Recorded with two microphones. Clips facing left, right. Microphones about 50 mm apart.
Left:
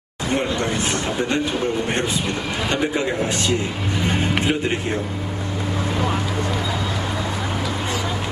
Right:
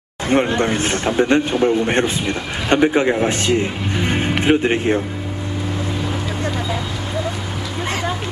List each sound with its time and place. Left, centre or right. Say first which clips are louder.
0.3 s speech: right 5 dB; right